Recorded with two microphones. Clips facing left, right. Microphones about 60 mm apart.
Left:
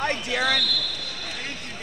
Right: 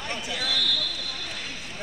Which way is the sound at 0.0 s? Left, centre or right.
Left.